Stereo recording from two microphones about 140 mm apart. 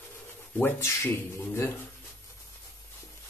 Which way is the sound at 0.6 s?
20° left (ahead or behind).